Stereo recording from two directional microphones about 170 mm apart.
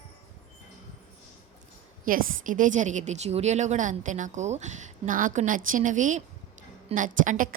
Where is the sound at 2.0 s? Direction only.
55° right (ahead or behind).